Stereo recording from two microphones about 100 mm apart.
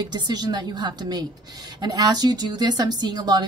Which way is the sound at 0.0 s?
45° right (ahead or behind).